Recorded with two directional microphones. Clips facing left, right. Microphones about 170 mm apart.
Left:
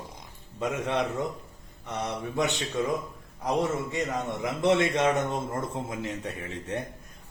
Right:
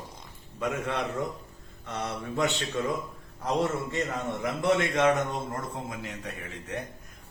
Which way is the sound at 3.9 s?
20° left (ahead or behind).